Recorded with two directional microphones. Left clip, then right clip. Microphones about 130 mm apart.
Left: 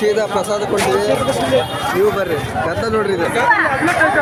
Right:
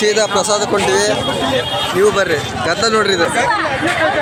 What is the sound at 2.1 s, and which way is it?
Speech, 5° right (ahead or behind).